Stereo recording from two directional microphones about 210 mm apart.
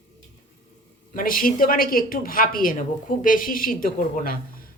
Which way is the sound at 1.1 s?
40° left (ahead or behind).